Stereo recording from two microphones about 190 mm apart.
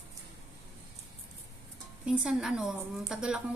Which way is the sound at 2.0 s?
5° right (ahead or behind).